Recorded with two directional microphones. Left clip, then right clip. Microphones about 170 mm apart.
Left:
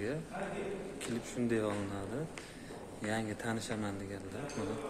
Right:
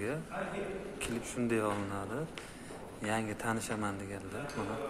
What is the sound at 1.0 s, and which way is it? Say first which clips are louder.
Speech: right 2 dB; centre (ahead or behind).